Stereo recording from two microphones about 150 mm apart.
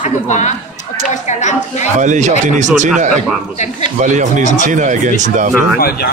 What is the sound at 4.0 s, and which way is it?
A man's voice, 55° right (ahead or behind).